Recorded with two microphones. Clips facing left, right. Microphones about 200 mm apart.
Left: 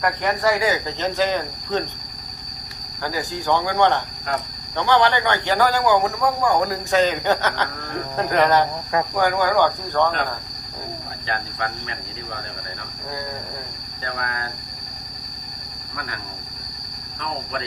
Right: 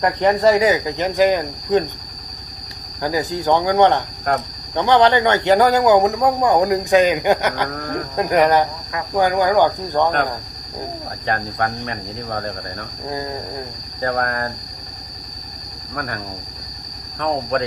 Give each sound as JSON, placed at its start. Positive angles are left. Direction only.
{"t": 0.0, "sound": "cricket", "side_deg": -25}
{"t": 3.0, "sound": "speech", "side_deg": -20}
{"t": 4.3, "sound": "cricket", "side_deg": -50}
{"t": 4.7, "sound": "speech", "side_deg": -20}
{"t": 8.1, "sound": "cricket", "side_deg": -15}
{"t": 11.3, "sound": "cricket", "side_deg": -50}
{"t": 14.0, "sound": "cricket", "side_deg": -50}
{"t": 17.2, "sound": "speech", "side_deg": -55}